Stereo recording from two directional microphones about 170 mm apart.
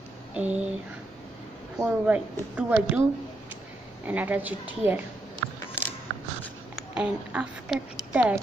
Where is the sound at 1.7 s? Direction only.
5° right (ahead or behind).